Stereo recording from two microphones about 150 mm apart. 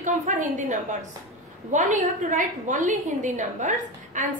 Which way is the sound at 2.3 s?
55° right (ahead or behind).